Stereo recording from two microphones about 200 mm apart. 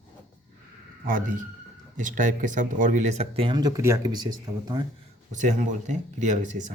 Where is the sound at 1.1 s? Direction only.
40° right (ahead or behind); by 4.8 s 20° right (ahead or behind).